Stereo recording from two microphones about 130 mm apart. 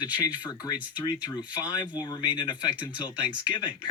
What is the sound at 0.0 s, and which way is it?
Speech, 35° left (ahead or behind).